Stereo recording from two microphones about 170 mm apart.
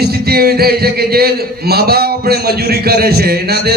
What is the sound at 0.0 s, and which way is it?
A man's voice, 65° right (ahead or behind).